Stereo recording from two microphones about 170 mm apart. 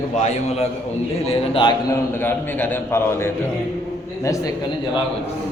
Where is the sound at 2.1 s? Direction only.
10° left (ahead or behind).